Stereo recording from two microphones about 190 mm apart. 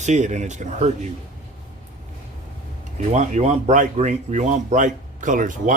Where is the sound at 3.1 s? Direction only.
35° right (ahead or behind).